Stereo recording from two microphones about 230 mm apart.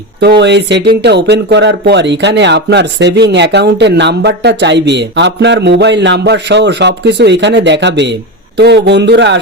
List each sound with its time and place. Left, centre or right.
0.2 s speech: right